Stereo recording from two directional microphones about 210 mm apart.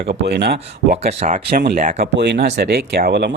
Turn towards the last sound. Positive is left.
turn(degrees=-50)  # may be behind; listen again after turning